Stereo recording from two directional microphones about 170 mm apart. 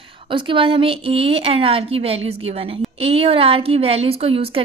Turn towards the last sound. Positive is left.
turn(degrees=-35)  # may be behind; listen again after turning